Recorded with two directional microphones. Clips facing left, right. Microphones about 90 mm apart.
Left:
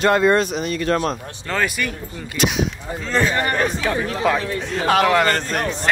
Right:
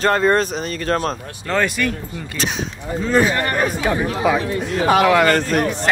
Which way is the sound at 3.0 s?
10° right (ahead or behind).